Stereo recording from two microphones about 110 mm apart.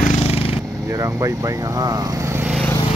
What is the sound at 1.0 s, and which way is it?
Speech, 30° right (ahead or behind).